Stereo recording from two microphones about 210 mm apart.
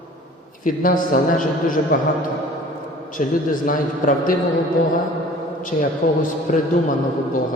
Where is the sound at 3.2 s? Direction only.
35° left (ahead or behind).